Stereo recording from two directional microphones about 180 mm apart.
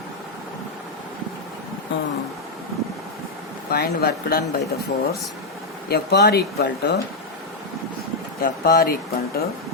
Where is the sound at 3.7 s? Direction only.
60° left (ahead or behind).